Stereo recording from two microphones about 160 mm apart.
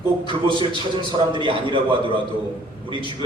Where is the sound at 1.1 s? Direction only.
30° right (ahead or behind).